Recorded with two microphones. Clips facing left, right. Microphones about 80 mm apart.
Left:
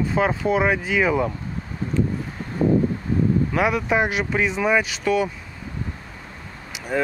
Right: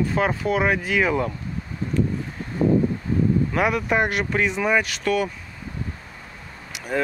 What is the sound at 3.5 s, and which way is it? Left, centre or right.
Speech, centre.